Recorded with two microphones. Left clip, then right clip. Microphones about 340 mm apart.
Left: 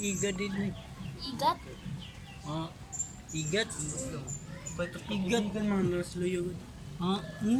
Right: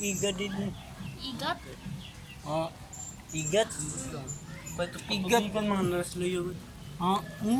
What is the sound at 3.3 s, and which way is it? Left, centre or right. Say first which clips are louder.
Speech: right 2 dB; centre.